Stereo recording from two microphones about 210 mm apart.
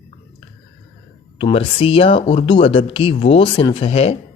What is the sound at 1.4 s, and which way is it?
Speech, 25° left (ahead or behind).